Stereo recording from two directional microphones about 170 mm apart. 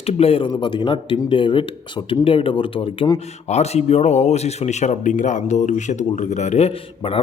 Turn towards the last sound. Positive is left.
turn(degrees=35)  # may be behind; listen again after turning